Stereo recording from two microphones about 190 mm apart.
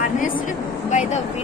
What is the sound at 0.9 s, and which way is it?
Speech, 40° left (ahead or behind).